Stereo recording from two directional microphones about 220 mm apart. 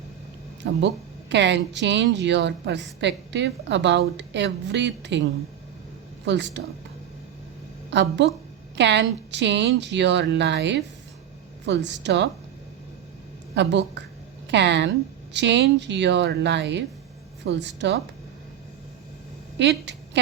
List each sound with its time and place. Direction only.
0.6 s speech: 55° right (ahead or behind)
7.9 s a woman's voice: 50° right (ahead or behind)
13.6 s speech: 50° right (ahead or behind)
19.5 s a woman's voice: 55° right (ahead or behind)